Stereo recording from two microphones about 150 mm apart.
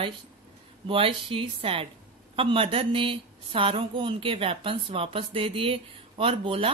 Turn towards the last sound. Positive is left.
turn(degrees=-40)  # may be behind; listen again after turning